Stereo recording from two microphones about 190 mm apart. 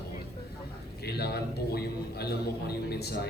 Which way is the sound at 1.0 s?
60° left (ahead or behind).